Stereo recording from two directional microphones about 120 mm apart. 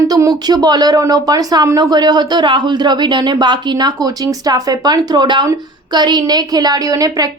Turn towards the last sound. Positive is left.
turn(degrees=-30)  # may be behind; listen again after turning